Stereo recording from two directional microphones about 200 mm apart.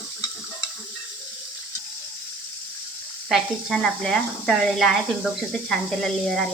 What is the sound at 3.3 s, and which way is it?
Speech, centre (ahead or behind).